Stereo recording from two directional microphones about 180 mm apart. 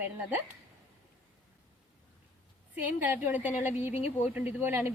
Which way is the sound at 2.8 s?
10° right (ahead or behind).